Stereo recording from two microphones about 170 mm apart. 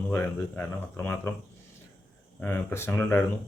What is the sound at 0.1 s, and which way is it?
Speech, 10° left (ahead or behind).